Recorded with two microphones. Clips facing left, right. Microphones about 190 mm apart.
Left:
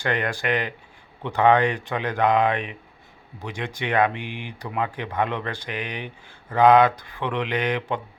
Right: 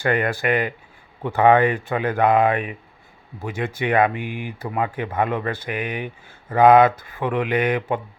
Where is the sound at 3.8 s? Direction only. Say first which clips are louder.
Right 3 dB; 10° right (ahead or behind).